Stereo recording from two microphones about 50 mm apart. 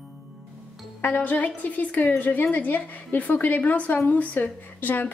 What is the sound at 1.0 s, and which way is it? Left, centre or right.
A woman's voice, left.